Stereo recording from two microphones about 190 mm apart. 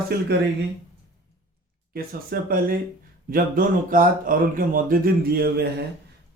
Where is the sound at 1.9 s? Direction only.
50° right (ahead or behind).